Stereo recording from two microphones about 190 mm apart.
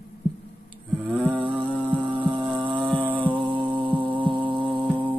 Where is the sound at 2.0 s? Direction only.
25° right (ahead or behind).